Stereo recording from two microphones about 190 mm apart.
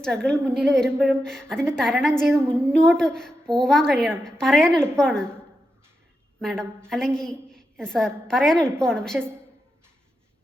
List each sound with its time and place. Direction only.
0.0 s a woman's voice: 5° left (ahead or behind)
2.4 s a woman's voice: 10° right (ahead or behind)
3.0 s a woman's voice: 5° left (ahead or behind)
6.4 s a woman's voice: 5° left (ahead or behind)